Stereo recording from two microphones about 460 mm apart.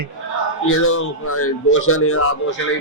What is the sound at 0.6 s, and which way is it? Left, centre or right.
A man's voice, left.